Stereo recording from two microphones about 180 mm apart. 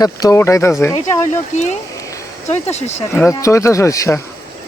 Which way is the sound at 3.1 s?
15° left (ahead or behind).